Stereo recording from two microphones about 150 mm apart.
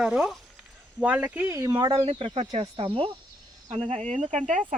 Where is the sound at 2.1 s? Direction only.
40° right (ahead or behind).